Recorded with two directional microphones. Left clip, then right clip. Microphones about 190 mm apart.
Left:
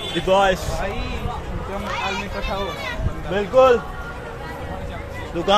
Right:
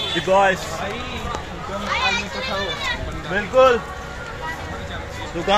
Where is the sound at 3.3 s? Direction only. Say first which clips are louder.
Even; 10° left (ahead or behind).